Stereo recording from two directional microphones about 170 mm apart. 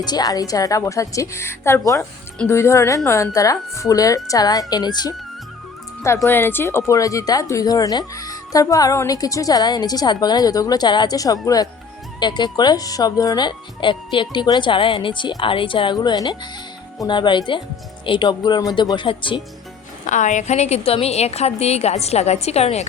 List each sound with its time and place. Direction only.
0.0 s a woman's voice: 25° left (ahead or behind)
6.2 s speech: 15° left (ahead or behind); by 19.4 s 30° left (ahead or behind)
20.1 s a woman's voice: 45° left (ahead or behind)